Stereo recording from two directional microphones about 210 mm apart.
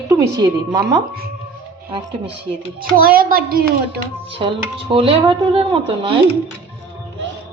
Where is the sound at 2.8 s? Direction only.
45° right (ahead or behind).